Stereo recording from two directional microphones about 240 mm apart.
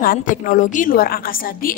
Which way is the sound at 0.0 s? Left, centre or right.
Left.